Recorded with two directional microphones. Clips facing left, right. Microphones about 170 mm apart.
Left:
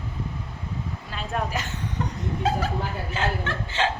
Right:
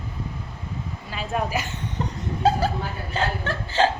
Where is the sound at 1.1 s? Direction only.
5° right (ahead or behind).